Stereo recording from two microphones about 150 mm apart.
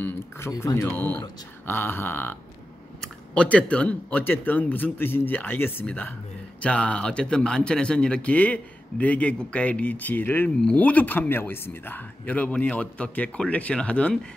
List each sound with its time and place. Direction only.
0.0 s speech: 20° left (ahead or behind)